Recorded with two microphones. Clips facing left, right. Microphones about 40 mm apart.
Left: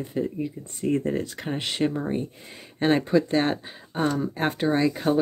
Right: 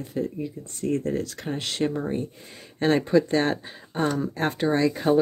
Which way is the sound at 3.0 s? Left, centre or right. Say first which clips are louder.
Right 1 dB; centre.